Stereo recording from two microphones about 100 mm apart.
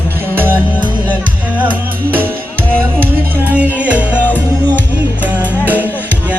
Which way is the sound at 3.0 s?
15° right (ahead or behind).